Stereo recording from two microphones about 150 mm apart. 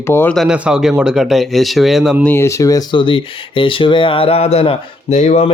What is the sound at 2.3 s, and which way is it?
Speech, 20° left (ahead or behind).